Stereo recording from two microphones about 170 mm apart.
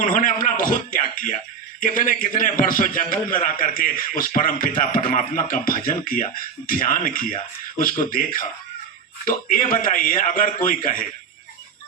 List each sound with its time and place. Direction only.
0.0 s a man's voice: 50° left (ahead or behind)